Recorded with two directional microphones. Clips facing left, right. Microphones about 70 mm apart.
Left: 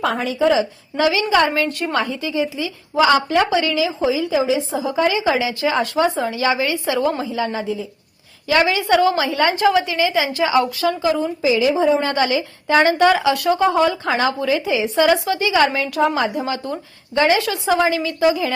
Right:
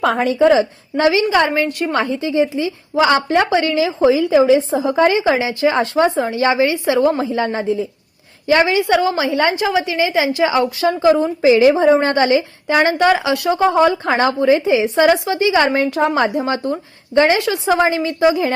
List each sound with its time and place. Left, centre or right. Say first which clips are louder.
0.0 s a woman's voice: right 4 dB; right
0.9 s a woman's voice: right 3 dB; right
1.5 s a woman's voice: right 3 dB; centre
1.9 s speech: right 3 dB; right
4.9 s a woman's voice: right 3 dB; right
12.6 s a woman's voice: left 1 dB; centre